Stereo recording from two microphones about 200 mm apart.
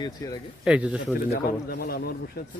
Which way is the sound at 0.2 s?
15° left (ahead or behind).